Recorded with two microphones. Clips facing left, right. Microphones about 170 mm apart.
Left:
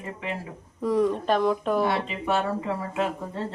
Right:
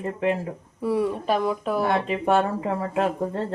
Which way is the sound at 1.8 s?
50° right (ahead or behind).